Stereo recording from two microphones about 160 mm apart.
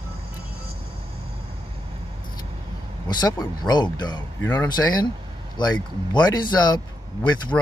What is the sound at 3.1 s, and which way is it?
Speech, 25° left (ahead or behind).